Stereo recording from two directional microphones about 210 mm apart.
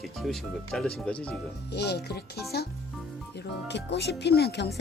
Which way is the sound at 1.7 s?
50° left (ahead or behind).